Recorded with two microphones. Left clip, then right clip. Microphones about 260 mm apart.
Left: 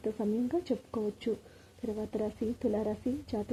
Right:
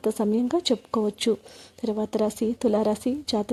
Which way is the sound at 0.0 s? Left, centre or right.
Right.